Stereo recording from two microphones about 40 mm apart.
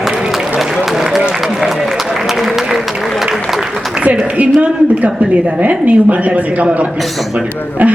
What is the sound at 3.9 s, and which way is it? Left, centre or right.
A woman's voice, right.